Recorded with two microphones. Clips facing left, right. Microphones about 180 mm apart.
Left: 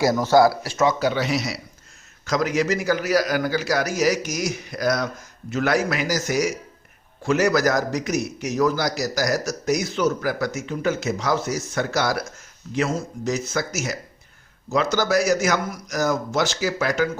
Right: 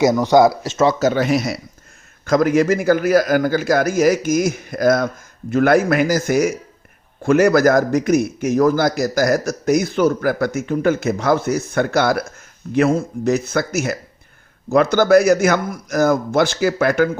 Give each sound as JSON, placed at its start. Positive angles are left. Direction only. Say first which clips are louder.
{"t": 0.3, "sound": "speech", "louder": "right 3 dB", "side_deg": -20}
{"t": 0.9, "sound": "a man's voice", "louder": "right 5 dB", "side_deg": -45}